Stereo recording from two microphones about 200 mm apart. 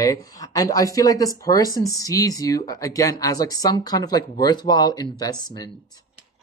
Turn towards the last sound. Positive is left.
turn(degrees=20)  # may be behind; listen again after turning